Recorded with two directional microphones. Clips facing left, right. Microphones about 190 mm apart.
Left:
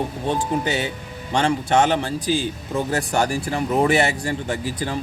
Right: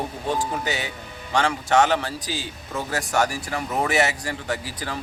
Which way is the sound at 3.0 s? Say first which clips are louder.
Left 2 dB; 30° left (ahead or behind).